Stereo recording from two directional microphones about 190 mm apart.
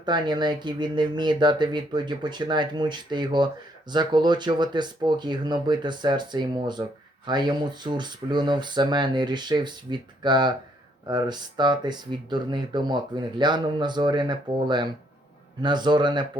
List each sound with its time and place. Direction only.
0.0 s speech: 25° right (ahead or behind)